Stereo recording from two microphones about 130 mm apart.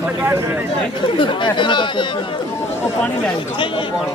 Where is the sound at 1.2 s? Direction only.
40° left (ahead or behind).